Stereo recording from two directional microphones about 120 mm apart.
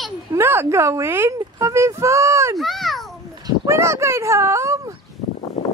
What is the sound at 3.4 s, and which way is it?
Speech, 25° right (ahead or behind).